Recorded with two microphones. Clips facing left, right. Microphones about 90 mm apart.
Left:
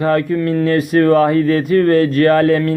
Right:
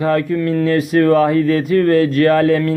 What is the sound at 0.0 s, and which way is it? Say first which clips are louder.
Speech: left 1 dB; 40° left (ahead or behind).